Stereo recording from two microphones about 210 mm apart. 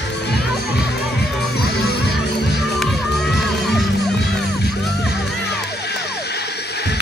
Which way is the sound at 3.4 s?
Centre (ahead or behind).